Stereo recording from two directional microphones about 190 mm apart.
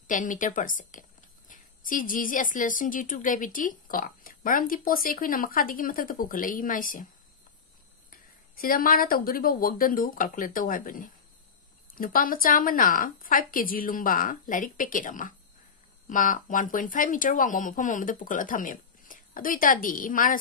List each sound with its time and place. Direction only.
0.0 s a woman's voice: 45° left (ahead or behind)
8.1 s a woman's voice: 50° left (ahead or behind)